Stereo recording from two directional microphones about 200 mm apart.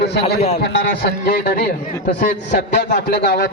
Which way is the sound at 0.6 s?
55° left (ahead or behind).